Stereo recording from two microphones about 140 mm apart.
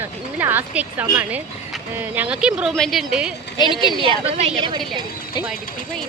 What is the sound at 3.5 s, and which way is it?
Speech, 30° left (ahead or behind).